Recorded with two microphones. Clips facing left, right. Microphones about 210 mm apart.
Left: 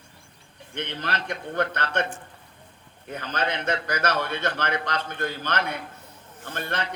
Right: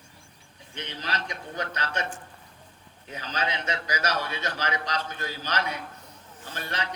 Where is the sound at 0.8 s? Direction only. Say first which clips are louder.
Left 4 dB; 55° left (ahead or behind).